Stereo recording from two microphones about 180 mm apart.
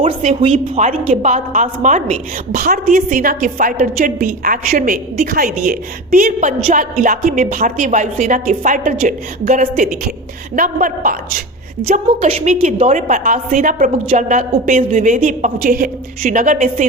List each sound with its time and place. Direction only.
0.0 s a woman's voice: 40° right (ahead or behind)
11.8 s a woman's voice: 35° right (ahead or behind)
15.6 s a woman's voice: 55° right (ahead or behind)